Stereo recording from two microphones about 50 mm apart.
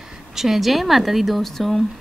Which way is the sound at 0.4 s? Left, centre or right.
Centre.